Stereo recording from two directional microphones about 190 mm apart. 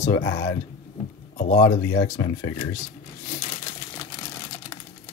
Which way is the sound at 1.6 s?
15° left (ahead or behind).